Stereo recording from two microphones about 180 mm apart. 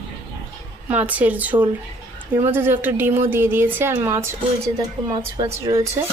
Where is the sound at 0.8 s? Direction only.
10° right (ahead or behind).